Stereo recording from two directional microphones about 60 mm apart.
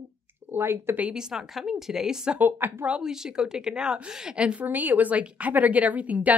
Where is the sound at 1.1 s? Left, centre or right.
Centre.